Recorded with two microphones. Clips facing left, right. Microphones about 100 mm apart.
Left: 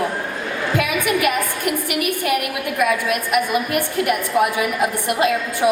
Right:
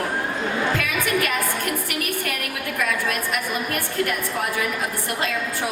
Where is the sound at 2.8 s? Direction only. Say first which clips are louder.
Left 6 dB; 15° left (ahead or behind).